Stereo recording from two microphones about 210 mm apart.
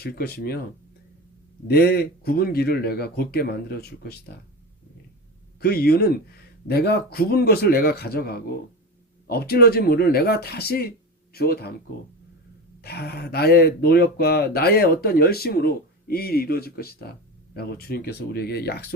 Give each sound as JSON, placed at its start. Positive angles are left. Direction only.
{"t": 0.0, "sound": "speech", "side_deg": 50}
{"t": 1.6, "sound": "speech", "side_deg": 50}
{"t": 5.5, "sound": "speech", "side_deg": 50}
{"t": 12.8, "sound": "speech", "side_deg": 50}